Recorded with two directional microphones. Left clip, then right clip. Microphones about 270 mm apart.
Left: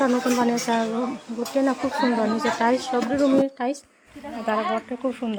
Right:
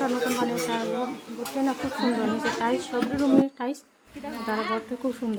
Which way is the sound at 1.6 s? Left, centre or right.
Left.